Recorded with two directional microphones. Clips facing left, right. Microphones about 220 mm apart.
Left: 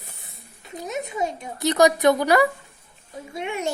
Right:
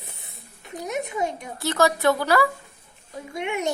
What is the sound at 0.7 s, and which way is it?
A woman's voice, 20° left (ahead or behind).